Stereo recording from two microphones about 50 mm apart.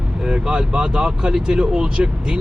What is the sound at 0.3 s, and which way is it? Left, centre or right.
Speech, centre.